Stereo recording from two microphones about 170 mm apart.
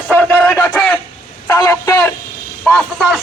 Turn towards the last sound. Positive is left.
turn(degrees=0)  # may be behind; listen again after turning